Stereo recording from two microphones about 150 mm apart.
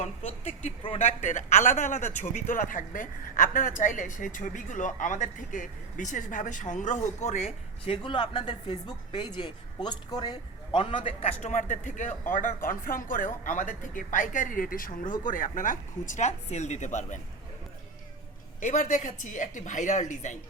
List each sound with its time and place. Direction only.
0.0 s a woman's voice: 45° left (ahead or behind)
8.0 s a woman's voice: 35° left (ahead or behind); by 12.1 s 55° left (ahead or behind)
12.3 s a woman's voice: 65° left (ahead or behind)
18.6 s a woman's voice: 55° left (ahead or behind)